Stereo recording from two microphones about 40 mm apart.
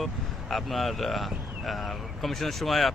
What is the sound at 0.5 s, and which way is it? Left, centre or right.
Speech, centre.